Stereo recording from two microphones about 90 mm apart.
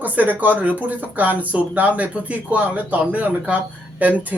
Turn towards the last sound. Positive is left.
turn(degrees=-20)  # may be behind; listen again after turning